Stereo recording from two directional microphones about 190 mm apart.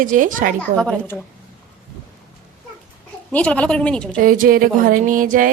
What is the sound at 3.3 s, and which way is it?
Speech, 5° left (ahead or behind).